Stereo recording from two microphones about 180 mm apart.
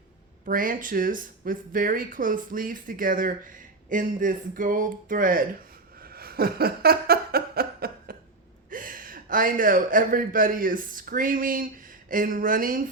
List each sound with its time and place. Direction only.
0.4 s speech: 50° right (ahead or behind)
6.0 s a sound: 55° right (ahead or behind)
8.7 s a man's voice: 50° right (ahead or behind)